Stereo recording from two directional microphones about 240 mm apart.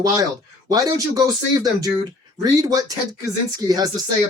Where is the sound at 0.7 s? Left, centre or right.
Centre.